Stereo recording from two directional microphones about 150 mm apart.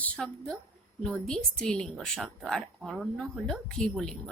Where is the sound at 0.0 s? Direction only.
10° left (ahead or behind).